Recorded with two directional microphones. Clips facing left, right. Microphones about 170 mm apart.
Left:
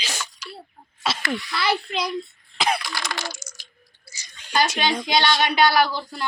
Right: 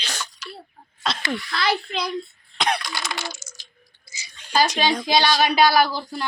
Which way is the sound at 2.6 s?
Centre (ahead or behind).